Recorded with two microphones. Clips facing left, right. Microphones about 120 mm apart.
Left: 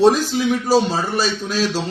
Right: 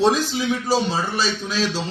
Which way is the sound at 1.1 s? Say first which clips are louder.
Left 3 dB; 45° left (ahead or behind).